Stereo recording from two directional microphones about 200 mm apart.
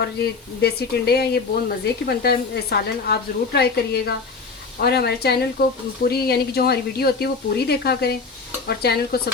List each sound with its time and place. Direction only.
0.2 s speech: 50° left (ahead or behind)